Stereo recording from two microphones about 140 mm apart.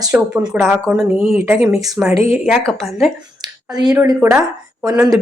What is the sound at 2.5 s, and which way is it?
Speech, 5° left (ahead or behind).